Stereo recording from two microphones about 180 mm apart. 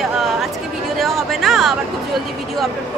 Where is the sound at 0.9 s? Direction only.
Centre (ahead or behind).